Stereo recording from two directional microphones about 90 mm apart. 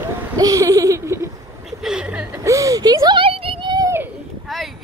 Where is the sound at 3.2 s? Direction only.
90° right; by 3.8 s 65° right (ahead or behind).